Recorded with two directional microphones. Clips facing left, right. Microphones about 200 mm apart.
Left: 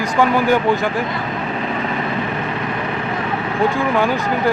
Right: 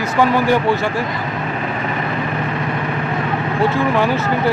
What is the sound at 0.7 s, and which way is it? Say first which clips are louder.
Speech: even; 15° left (ahead or behind).